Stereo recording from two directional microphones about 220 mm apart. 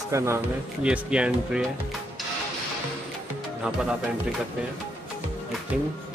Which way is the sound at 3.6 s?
5° right (ahead or behind).